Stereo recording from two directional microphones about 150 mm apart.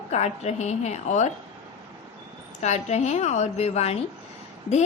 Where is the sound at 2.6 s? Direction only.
50° left (ahead or behind).